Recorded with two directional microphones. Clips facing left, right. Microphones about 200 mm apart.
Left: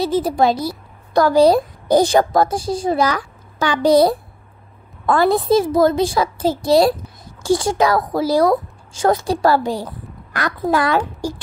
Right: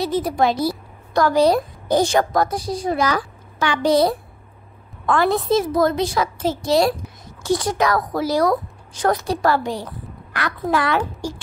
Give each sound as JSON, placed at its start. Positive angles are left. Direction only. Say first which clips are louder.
{"t": 0.0, "sound": "a woman's voice", "louder": "left 3 dB", "side_deg": 30}